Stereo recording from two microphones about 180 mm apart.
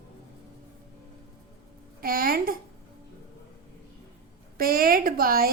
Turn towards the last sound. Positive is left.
turn(degrees=-55)  # may be behind; listen again after turning